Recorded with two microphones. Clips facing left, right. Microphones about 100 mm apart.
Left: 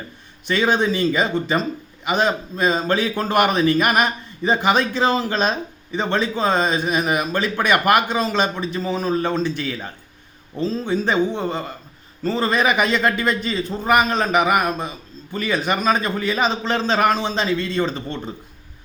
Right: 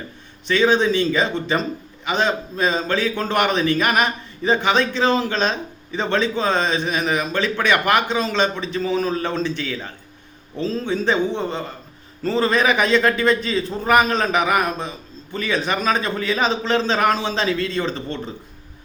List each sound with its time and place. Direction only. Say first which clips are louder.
0.5 s a man's voice: right 2 dB; 10° left (ahead or behind)